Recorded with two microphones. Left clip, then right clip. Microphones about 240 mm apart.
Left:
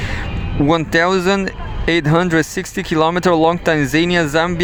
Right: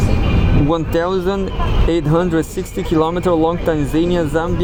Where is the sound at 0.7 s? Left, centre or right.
Left.